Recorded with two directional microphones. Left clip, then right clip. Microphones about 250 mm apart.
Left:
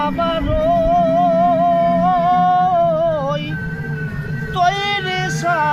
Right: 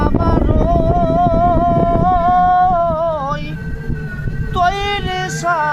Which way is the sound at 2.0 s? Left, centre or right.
Centre.